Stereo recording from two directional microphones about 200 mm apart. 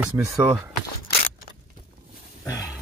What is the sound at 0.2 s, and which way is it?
Speech, 10° right (ahead or behind).